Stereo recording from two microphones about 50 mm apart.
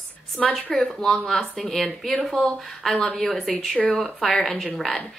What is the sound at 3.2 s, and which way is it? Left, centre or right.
Speech, centre.